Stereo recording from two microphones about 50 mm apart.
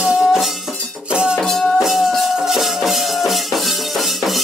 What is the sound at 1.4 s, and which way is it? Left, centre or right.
Music, centre.